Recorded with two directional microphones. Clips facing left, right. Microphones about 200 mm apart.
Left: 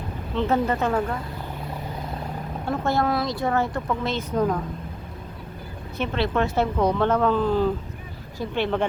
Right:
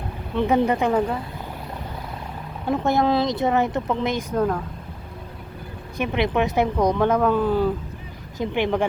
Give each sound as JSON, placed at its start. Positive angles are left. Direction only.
{"t": 0.3, "sound": "speech", "side_deg": -15}
{"t": 2.6, "sound": "speech", "side_deg": -20}
{"t": 6.0, "sound": "speech", "side_deg": -15}